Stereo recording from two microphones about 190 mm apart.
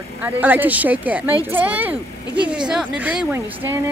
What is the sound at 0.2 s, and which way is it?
A woman's voice, 10° right (ahead or behind).